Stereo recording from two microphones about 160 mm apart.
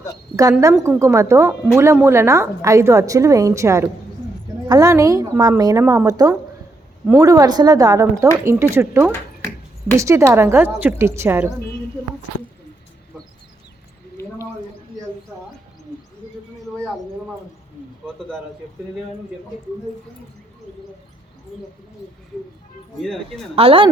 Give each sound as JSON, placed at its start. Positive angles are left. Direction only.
{"t": 0.6, "sound": "a woman's voice", "side_deg": -15}
{"t": 14.2, "sound": "a sound", "side_deg": 20}
{"t": 23.0, "sound": "speech", "side_deg": 5}
{"t": 23.6, "sound": "speech", "side_deg": -35}